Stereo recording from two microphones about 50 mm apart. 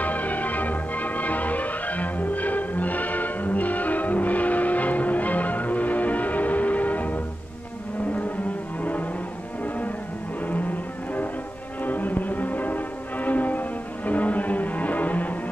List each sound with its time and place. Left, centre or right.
0.0 s music: left
11.8 s music: left